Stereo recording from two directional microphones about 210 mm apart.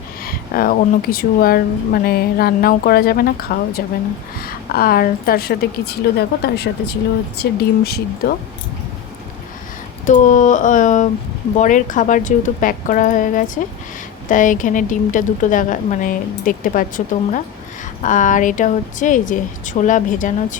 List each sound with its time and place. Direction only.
0.3 s a woman's voice: 45° left (ahead or behind)
10.1 s a woman's voice: 35° left (ahead or behind)